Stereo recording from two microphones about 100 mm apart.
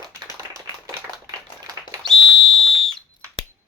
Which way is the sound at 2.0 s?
Centre (ahead or behind).